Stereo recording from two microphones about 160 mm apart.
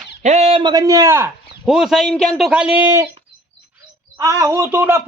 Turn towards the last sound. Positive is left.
turn(degrees=-15)  # may be behind; listen again after turning